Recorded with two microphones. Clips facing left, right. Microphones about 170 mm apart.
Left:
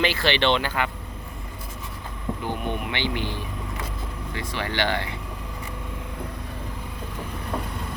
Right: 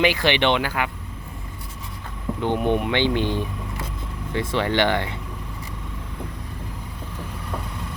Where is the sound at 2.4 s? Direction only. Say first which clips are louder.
Right 9 dB; 25° right (ahead or behind).